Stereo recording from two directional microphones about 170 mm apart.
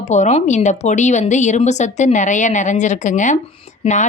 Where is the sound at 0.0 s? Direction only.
45° left (ahead or behind).